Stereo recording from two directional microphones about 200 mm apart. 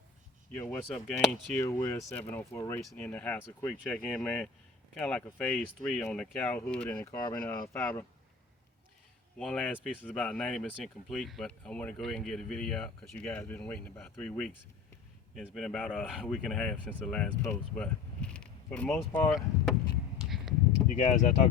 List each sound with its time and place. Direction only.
0.6 s speech: 10° left (ahead or behind)
9.4 s speech: 5° left (ahead or behind)
20.1 s a sound: centre (ahead or behind)
20.9 s speech: 40° left (ahead or behind)